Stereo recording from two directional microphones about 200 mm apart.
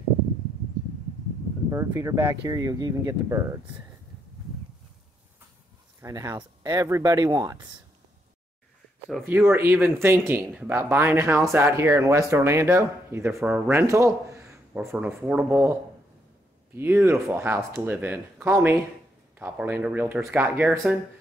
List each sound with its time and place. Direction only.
1.7 s speech: 15° right (ahead or behind)
5.9 s speech: 15° right (ahead or behind)
9.3 s speech: 10° right (ahead or behind)
16.7 s speech: 10° right (ahead or behind)